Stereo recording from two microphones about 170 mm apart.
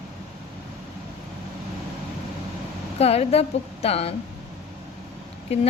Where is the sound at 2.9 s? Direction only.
35° left (ahead or behind).